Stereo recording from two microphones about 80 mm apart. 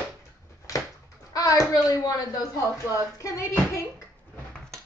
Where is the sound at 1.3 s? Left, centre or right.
Left.